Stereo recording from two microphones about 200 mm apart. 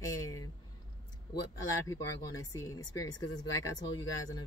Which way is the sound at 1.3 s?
20° left (ahead or behind).